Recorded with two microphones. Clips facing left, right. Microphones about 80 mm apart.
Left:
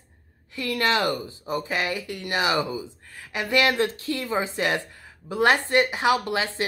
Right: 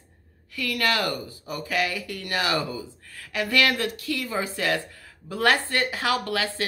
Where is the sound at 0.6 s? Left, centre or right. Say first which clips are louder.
Left 2 dB; left.